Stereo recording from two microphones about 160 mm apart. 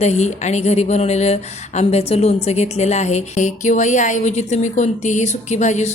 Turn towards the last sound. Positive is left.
turn(degrees=45)  # may be behind; listen again after turning